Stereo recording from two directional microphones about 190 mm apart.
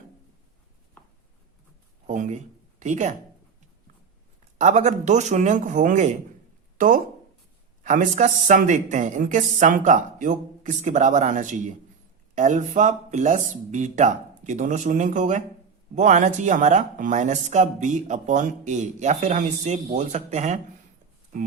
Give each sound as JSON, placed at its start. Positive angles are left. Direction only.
{"t": 1.0, "sound": "writing", "side_deg": 10}
{"t": 2.0, "sound": "speech", "side_deg": -40}
{"t": 4.5, "sound": "speech", "side_deg": -40}